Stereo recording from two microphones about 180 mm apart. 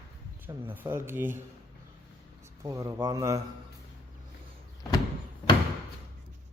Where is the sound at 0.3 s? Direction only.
10° right (ahead or behind).